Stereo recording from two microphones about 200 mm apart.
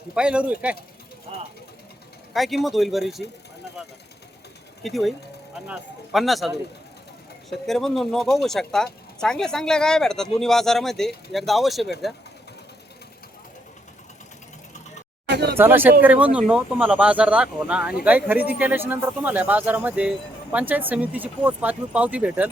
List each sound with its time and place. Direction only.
0.1 s speech: 5° right (ahead or behind)
2.3 s speech: centre (ahead or behind)
4.8 s speech: centre (ahead or behind)
7.7 s speech: centre (ahead or behind)
15.3 s a sound: 55° right (ahead or behind)
15.5 s speech: 10° right (ahead or behind)